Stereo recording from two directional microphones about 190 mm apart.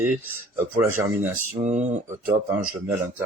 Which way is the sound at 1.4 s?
40° right (ahead or behind).